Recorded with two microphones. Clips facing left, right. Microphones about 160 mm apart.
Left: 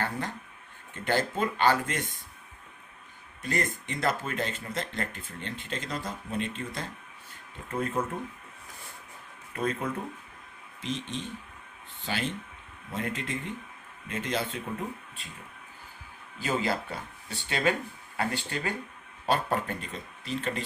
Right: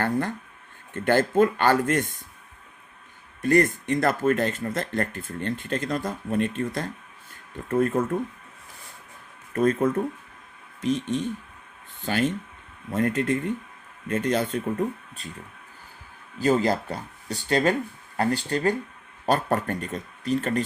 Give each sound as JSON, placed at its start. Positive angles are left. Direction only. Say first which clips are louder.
{"t": 0.0, "sound": "speech", "louder": "right 7 dB", "side_deg": -50}
{"t": 3.4, "sound": "speech", "louder": "right 11 dB", "side_deg": -50}
{"t": 9.5, "sound": "speech", "louder": "right 9 dB", "side_deg": -45}
{"t": 16.4, "sound": "speech", "louder": "right 8 dB", "side_deg": -40}